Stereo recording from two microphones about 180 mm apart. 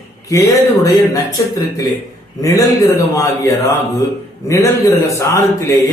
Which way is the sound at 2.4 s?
20° left (ahead or behind).